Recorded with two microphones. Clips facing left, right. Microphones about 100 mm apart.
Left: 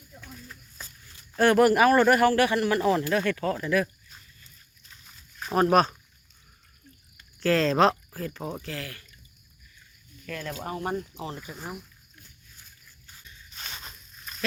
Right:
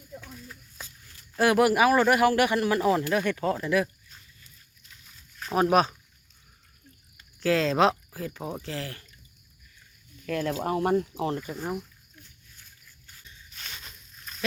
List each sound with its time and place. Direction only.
1.4 s speech: 5° right (ahead or behind)
2.3 s speech: 15° right (ahead or behind)
5.5 s speech: 5° right (ahead or behind)
7.3 s speech: 5° right (ahead or behind)
8.6 s speech: 25° right (ahead or behind)
10.2 s speech: 45° right (ahead or behind)
11.3 s speech: 10° left (ahead or behind)
13.5 s a sound: 25° left (ahead or behind)